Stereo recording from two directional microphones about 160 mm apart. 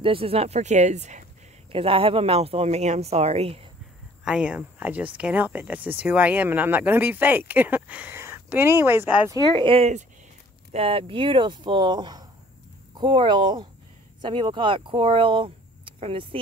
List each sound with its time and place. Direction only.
0.0 s speech: 35° right (ahead or behind)
1.7 s speech: 35° right (ahead or behind)
4.2 s speech: 5° right (ahead or behind)
9.5 s speech: 35° right (ahead or behind)